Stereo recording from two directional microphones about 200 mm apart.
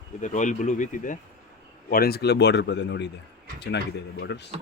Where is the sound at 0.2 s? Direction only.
40° left (ahead or behind); by 4.5 s 60° left (ahead or behind).